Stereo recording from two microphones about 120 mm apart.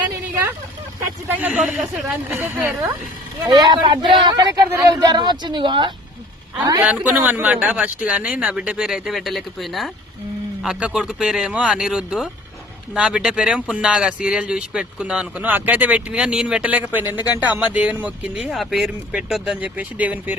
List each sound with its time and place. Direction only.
1.5 s speech: centre (ahead or behind)
2.3 s speech: 15° right (ahead or behind)
3.4 s speech: 35° right (ahead or behind)
6.7 s speech: 15° right (ahead or behind)
17.2 s speech: 35° left (ahead or behind)
17.4 s speech: 15° right (ahead or behind)